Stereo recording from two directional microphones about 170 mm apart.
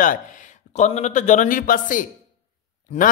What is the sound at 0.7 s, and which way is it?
A man's voice, 45° left (ahead or behind).